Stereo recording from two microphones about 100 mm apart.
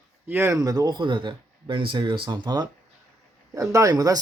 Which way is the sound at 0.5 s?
40° right (ahead or behind).